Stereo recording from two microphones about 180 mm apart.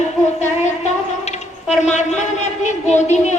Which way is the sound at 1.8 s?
40° left (ahead or behind).